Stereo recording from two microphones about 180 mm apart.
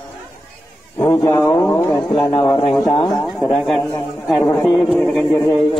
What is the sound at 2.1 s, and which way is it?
Speech, 20° left (ahead or behind).